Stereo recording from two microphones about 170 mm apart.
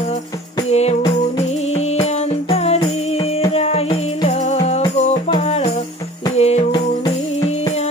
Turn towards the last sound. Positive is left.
turn(degrees=40)  # may be behind; listen again after turning